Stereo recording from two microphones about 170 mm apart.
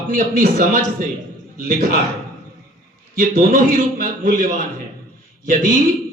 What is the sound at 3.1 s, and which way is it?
Speech, 55° right (ahead or behind).